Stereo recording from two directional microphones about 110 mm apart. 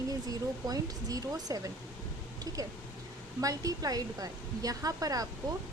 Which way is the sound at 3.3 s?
30° right (ahead or behind).